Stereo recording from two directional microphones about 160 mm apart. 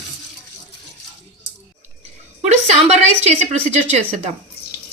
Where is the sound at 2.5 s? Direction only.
45° right (ahead or behind).